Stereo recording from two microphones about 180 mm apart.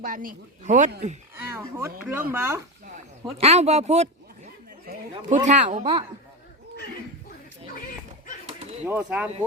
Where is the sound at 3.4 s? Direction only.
35° right (ahead or behind).